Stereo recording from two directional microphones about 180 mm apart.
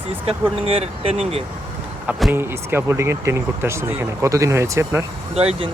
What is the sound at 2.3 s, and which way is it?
Speech, 10° right (ahead or behind).